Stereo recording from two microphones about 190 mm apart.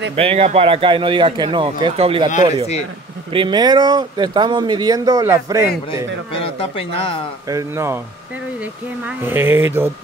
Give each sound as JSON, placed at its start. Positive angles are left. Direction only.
{"t": 0.1, "sound": "speech", "side_deg": -30}
{"t": 3.3, "sound": "speech", "side_deg": -25}
{"t": 6.3, "sound": "speech", "side_deg": 30}
{"t": 7.4, "sound": "speech", "side_deg": -15}
{"t": 9.0, "sound": "speech", "side_deg": -10}